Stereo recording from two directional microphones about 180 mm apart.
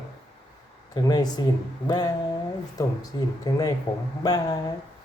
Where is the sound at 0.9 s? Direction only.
20° left (ahead or behind).